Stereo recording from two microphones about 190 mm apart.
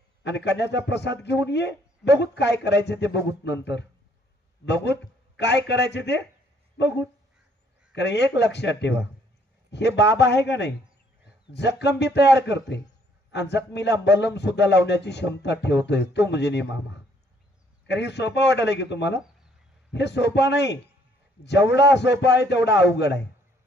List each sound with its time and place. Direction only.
0.2 s a man's voice: 65° left (ahead or behind)
4.6 s a man's voice: 65° left (ahead or behind)
7.9 s a man's voice: 65° left (ahead or behind)
17.8 s a man's voice: 65° left (ahead or behind)